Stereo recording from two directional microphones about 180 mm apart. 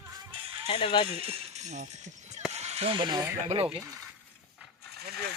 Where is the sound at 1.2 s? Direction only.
35° right (ahead or behind).